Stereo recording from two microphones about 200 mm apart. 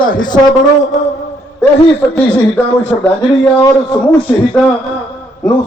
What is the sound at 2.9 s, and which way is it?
Speech, 10° left (ahead or behind).